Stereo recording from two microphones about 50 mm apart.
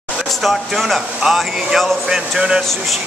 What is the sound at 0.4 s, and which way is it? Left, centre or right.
Speech, centre.